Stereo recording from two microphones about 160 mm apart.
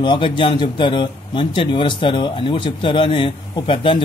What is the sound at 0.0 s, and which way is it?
Speech, 30° left (ahead or behind).